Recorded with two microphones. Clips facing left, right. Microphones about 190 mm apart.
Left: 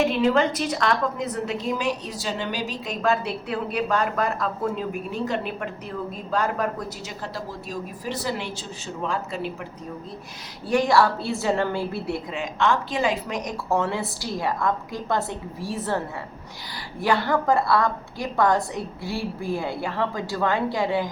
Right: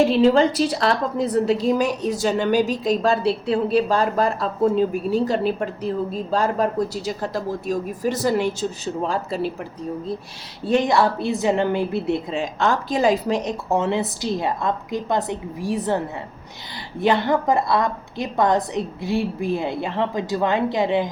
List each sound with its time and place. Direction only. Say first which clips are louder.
0.0 s a woman's voice: right 5 dB; 30° right (ahead or behind)
10.7 s a woman's voice: right 1 dB; 20° right (ahead or behind)
12.4 s a woman's voice: right 2 dB; 35° right (ahead or behind); by 16.0 s 15° right (ahead or behind)
17.0 s a woman's voice: right 3 dB; 20° right (ahead or behind)